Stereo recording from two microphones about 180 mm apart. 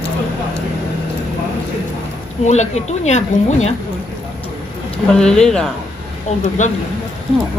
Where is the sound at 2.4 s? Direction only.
40° left (ahead or behind).